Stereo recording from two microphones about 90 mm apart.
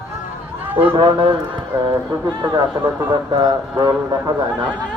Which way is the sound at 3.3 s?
50° right (ahead or behind).